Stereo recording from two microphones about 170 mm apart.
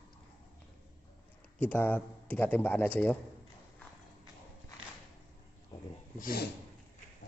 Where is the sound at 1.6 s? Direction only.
10° left (ahead or behind).